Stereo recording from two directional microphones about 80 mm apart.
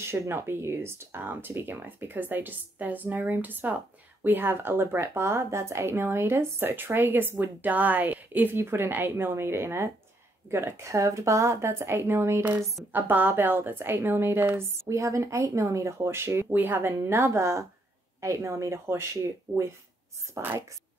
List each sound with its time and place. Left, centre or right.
0.0 s speech: right
14.9 s speech: right
17.0 s speech: right
20.4 s speech: right